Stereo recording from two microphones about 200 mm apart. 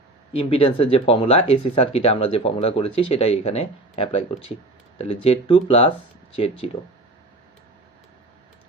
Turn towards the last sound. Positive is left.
turn(degrees=30)  # may be behind; listen again after turning